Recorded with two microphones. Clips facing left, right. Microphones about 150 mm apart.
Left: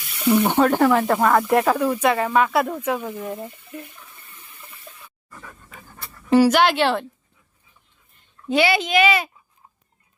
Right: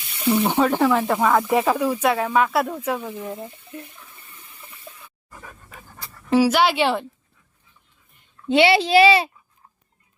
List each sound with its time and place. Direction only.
0.3 s speech: centre (ahead or behind)
3.2 s speech: 10° left (ahead or behind)
4.9 s pig: 5° right (ahead or behind)
5.3 s dog: 15° right (ahead or behind)
5.9 s pant: centre (ahead or behind)
8.4 s a child's voice: 30° right (ahead or behind)